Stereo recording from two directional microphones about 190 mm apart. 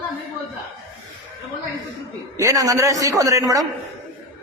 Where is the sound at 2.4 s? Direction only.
15° right (ahead or behind).